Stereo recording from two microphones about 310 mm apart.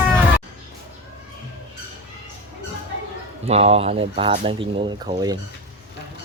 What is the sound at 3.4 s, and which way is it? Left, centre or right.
Speech, centre.